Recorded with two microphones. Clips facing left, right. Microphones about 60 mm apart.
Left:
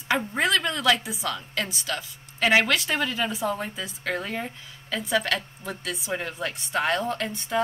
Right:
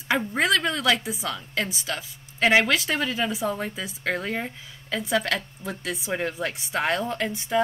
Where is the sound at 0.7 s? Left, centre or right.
Centre.